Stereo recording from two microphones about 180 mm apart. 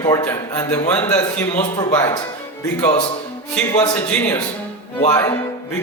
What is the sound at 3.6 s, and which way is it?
A man's voice, 5° left (ahead or behind).